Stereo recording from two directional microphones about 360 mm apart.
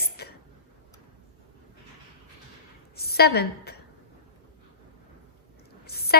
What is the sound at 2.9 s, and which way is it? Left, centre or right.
Speech, left.